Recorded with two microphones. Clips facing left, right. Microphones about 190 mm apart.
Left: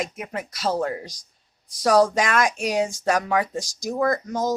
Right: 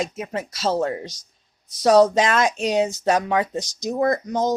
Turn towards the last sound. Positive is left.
turn(degrees=-20)  # may be behind; listen again after turning